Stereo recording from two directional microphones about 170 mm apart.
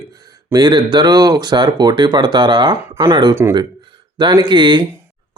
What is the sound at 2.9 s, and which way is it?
Speech, 15° right (ahead or behind).